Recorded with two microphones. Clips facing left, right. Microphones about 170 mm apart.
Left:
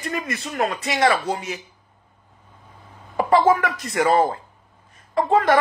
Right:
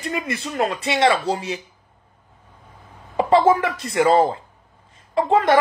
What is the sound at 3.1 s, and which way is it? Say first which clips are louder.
A man's voice: right 1 dB; 25° right (ahead or behind).